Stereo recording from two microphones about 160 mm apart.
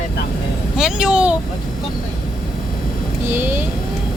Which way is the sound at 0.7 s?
5° right (ahead or behind).